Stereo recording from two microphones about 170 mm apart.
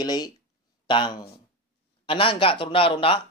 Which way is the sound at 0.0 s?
25° left (ahead or behind).